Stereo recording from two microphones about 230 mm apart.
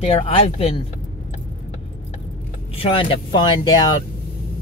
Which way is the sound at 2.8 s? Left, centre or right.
Left.